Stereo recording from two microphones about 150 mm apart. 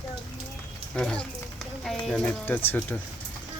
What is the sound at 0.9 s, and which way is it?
Speech, 5° left (ahead or behind).